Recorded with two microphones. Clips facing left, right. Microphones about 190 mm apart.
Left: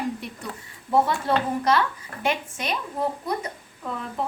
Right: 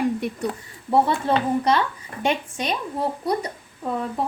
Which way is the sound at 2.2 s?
30° right (ahead or behind).